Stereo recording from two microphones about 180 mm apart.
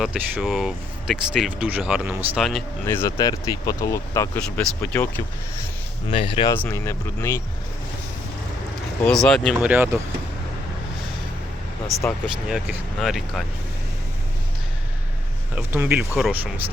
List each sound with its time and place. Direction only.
0.0 s speech: 5° right (ahead or behind)
2.8 s speech: 15° left (ahead or behind)
6.1 s speech: 30° left (ahead or behind)
6.5 s speech: 15° left (ahead or behind)
9.0 s speech: 5° left (ahead or behind)
9.6 s speech: 10° right (ahead or behind)
12.2 s speech: centre (ahead or behind)
15.5 s speech: 10° right (ahead or behind)